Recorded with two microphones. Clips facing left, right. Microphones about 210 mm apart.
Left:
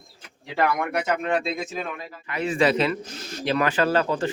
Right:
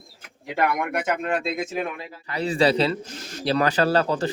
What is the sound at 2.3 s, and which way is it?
A man's voice, 35° right (ahead or behind).